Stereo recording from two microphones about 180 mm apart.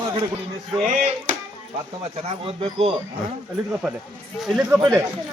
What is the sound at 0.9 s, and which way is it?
Speech, 45° right (ahead or behind).